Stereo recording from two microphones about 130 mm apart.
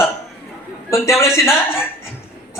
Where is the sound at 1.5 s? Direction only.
20° left (ahead or behind).